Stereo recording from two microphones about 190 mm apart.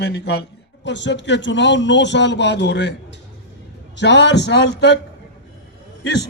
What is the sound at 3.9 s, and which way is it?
A man's voice, 65° left (ahead or behind).